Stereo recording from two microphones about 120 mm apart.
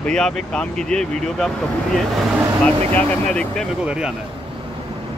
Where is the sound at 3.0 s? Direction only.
10° left (ahead or behind).